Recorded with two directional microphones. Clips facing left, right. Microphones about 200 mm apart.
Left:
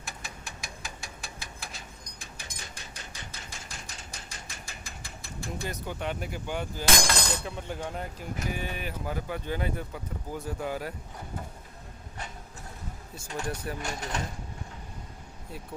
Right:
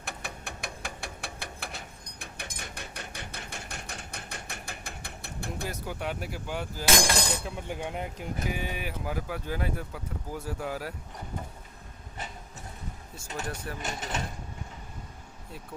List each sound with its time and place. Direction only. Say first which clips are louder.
0.0 s a sound: right 4 dB; 60° right (ahead or behind)
5.6 s speech: left 1 dB; 5° right (ahead or behind)
13.3 s speech: left 2 dB; 5° right (ahead or behind)